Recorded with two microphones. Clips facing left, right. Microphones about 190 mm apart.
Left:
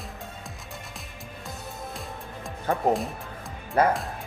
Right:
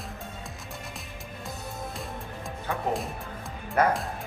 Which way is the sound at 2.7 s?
50° left (ahead or behind).